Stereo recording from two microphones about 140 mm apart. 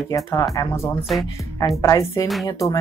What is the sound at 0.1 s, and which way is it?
Speech, 25° left (ahead or behind).